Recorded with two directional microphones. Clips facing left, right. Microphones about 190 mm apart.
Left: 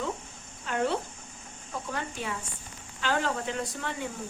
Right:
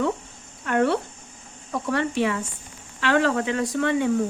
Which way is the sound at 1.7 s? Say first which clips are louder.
Right 11 dB; 75° right (ahead or behind).